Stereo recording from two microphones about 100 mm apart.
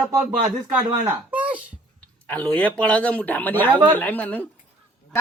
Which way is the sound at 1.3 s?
15° right (ahead or behind).